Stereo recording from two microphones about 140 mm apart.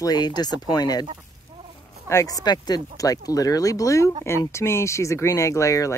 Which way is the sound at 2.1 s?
25° left (ahead or behind).